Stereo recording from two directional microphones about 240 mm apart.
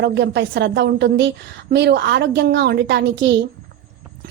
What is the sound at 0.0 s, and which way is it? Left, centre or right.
A woman's voice, right.